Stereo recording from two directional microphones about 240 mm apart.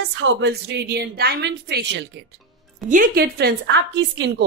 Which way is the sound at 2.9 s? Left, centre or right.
Right.